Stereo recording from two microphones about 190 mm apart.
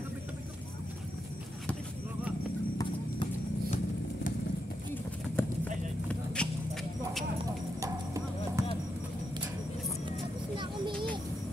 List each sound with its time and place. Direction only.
6.0 s vehicle: 5° left (ahead or behind)
7.8 s clip-clop: 15° right (ahead or behind)